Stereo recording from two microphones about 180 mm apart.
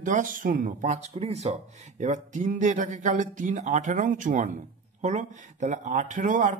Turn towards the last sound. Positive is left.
turn(degrees=-45)  # may be behind; listen again after turning